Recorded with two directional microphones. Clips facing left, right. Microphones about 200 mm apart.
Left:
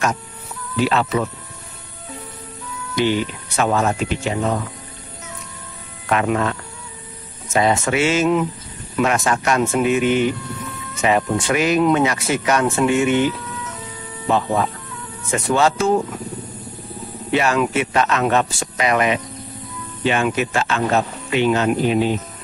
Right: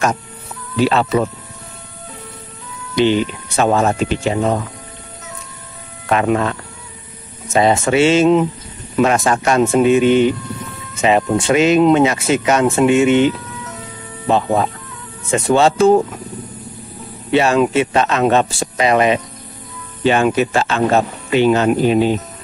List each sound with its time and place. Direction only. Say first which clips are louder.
0.7 s speech: right 4 dB; 30° right (ahead or behind)
3.0 s speech: right 5 dB; 25° right (ahead or behind)
6.0 s speech: right 3 dB; 35° right (ahead or behind)
7.5 s speech: right 4 dB; 25° right (ahead or behind)
14.3 s speech: right 3 dB; 35° right (ahead or behind)
17.3 s speech: right 5 dB; 30° right (ahead or behind)